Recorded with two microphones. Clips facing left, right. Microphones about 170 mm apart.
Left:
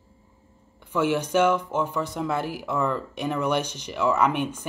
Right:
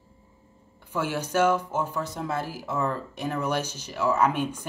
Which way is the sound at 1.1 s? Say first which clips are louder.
Right 1 dB; 10° right (ahead or behind).